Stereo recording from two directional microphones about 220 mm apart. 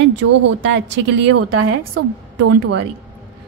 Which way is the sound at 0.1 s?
55° right (ahead or behind).